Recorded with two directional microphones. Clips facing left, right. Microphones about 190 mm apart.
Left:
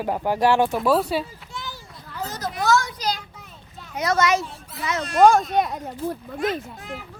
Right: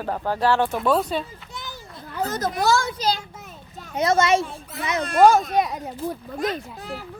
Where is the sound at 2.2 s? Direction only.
50° right (ahead or behind).